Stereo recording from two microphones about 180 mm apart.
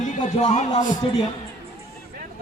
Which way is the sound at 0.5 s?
40° left (ahead or behind).